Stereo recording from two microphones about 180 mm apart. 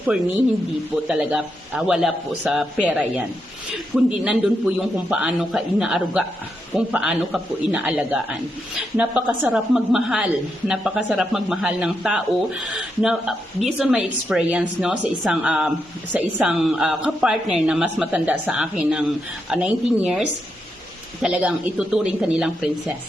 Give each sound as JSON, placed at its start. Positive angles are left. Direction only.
{"t": 1.0, "sound": "a woman's voice", "side_deg": -5}
{"t": 2.9, "sound": "a woman's voice", "side_deg": -10}